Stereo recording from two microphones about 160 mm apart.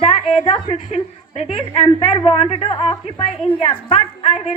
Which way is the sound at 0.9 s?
40° left (ahead or behind).